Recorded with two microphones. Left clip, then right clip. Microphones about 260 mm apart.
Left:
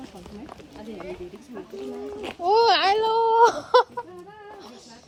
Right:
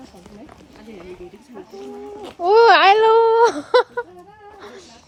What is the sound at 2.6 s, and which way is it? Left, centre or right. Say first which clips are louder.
Speech: right 10 dB; right.